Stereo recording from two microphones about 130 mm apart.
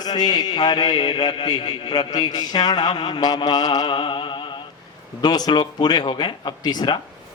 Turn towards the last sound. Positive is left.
turn(degrees=30)  # may be behind; listen again after turning